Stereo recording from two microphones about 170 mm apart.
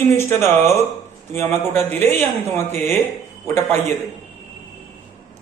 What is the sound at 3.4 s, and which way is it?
Speech, 15° left (ahead or behind).